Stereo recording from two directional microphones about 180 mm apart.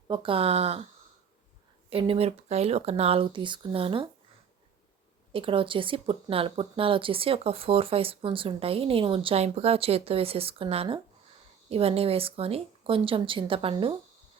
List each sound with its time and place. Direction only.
0.1 s speech: 30° right (ahead or behind)
1.9 s speech: 30° right (ahead or behind)
5.3 s speech: 30° right (ahead or behind)